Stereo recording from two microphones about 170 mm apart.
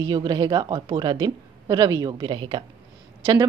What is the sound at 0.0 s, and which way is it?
Speech, 25° right (ahead or behind).